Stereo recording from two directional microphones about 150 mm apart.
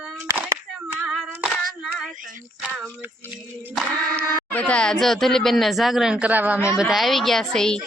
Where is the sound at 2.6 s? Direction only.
10° right (ahead or behind).